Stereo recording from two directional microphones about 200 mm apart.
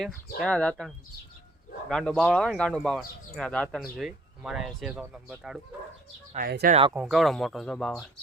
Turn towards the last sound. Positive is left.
turn(degrees=5)  # may be behind; listen again after turning